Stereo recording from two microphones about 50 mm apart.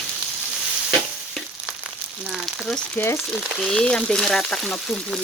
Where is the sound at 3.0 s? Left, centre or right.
Left.